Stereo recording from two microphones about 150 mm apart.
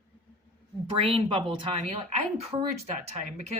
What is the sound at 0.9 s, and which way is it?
A woman's voice, 40° right (ahead or behind).